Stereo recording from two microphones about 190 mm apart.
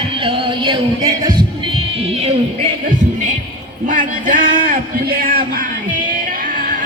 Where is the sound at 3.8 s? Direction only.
45° right (ahead or behind).